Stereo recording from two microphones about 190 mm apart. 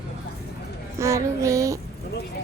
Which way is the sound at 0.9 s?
15° right (ahead or behind).